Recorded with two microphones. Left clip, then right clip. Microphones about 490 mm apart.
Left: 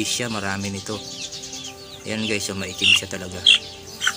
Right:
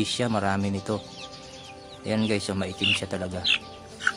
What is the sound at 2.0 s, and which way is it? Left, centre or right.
Speech, right.